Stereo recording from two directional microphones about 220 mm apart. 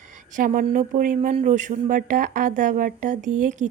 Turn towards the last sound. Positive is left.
turn(degrees=-35)  # may be behind; listen again after turning